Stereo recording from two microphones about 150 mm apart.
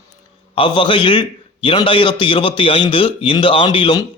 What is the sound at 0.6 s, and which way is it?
A man's voice, 35° left (ahead or behind).